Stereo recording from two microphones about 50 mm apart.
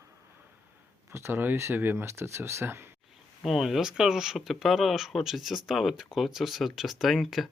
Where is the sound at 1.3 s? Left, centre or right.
Right.